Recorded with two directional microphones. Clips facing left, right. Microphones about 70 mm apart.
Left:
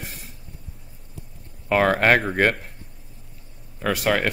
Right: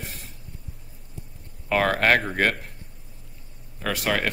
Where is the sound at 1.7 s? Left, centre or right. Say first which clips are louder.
Left 3 dB; centre.